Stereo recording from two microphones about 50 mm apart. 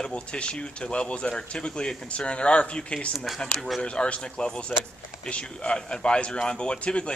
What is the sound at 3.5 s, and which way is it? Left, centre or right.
Speech, centre.